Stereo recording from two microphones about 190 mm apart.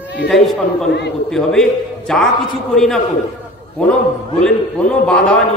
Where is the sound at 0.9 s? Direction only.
60° left (ahead or behind).